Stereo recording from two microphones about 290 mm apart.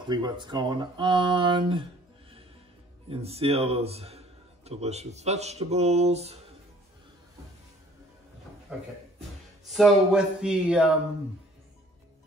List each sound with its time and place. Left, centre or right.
0.0 s speech: centre
3.1 s speech: centre
9.7 s speech: centre